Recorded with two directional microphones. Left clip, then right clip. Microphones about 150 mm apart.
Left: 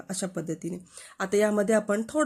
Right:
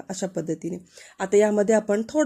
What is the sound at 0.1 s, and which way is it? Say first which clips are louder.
Speech: right 5 dB; 20° right (ahead or behind).